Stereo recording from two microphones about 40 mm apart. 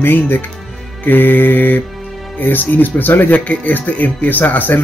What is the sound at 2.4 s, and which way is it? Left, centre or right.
Speech, left.